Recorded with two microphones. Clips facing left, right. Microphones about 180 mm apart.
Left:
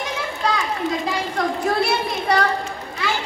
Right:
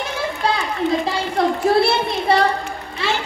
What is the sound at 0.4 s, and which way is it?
Children playing, 30° right (ahead or behind).